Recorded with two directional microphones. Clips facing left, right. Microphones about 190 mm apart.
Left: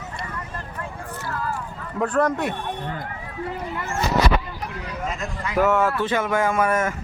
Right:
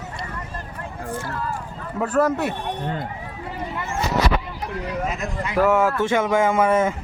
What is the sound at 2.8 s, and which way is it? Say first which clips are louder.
Speech: right 4 dB; 25° right (ahead or behind).